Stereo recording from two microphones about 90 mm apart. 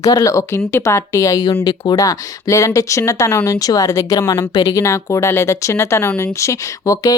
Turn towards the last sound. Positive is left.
turn(degrees=40)  # may be behind; listen again after turning